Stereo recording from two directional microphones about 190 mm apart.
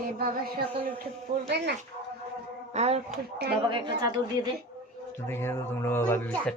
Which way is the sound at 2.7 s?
35° right (ahead or behind).